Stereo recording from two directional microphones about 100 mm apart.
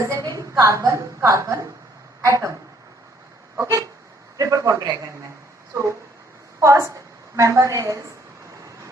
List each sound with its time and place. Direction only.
0.0 s a sound: 30° right (ahead or behind)
0.3 s a woman's voice: 30° right (ahead or behind)
3.6 s a man's voice: 30° right (ahead or behind)
6.6 s a woman's voice: 30° right (ahead or behind)